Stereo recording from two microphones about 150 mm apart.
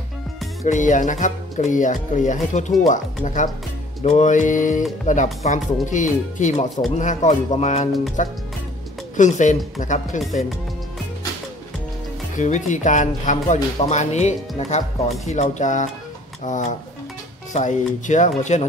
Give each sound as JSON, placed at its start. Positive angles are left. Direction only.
{"t": 0.7, "sound": "speech", "side_deg": 55}
{"t": 12.4, "sound": "speech", "side_deg": 55}